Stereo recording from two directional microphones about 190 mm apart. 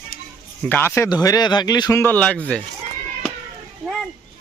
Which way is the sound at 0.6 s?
10° left (ahead or behind).